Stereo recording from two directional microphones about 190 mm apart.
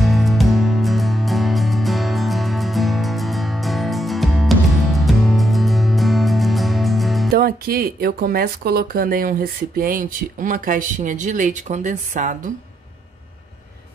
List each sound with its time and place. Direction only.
0.0 s music: centre (ahead or behind)
7.3 s speech: 50° right (ahead or behind)